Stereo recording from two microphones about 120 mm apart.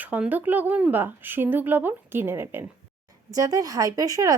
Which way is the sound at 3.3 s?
30° right (ahead or behind).